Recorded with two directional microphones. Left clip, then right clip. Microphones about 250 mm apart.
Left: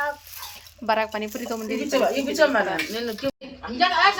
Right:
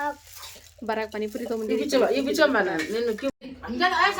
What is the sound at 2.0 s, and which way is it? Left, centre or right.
Speech, centre.